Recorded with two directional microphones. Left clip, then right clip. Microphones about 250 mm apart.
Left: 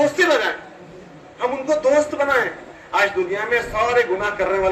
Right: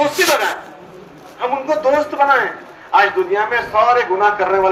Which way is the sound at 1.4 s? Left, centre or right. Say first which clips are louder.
Right 2 dB; left.